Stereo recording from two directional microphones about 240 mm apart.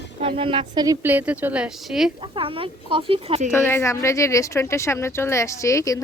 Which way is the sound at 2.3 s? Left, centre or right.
Right.